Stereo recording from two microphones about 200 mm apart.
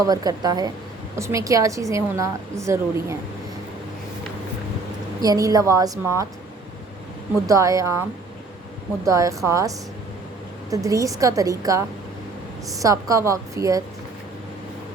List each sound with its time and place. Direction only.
0.0 s a woman's voice: 20° right (ahead or behind)
5.2 s a woman's voice: 20° right (ahead or behind)
7.4 s a woman's voice: 15° right (ahead or behind)
9.0 s a woman's voice: 15° right (ahead or behind)